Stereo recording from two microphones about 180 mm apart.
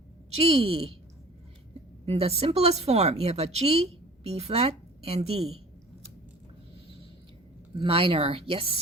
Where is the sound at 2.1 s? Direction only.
35° right (ahead or behind).